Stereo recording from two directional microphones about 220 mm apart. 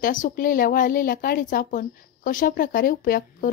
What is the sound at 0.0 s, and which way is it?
A woman's voice, 35° left (ahead or behind).